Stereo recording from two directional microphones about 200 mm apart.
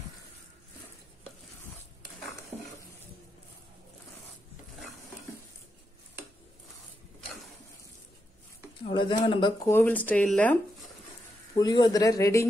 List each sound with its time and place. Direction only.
8.8 s speech: 25° left (ahead or behind)
9.7 s speech: 10° left (ahead or behind)
11.5 s speech: 20° left (ahead or behind)